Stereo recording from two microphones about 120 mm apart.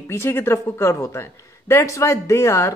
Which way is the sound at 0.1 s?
20° left (ahead or behind).